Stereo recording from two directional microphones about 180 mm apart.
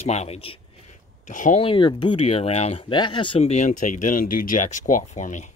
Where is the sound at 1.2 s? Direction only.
45° left (ahead or behind).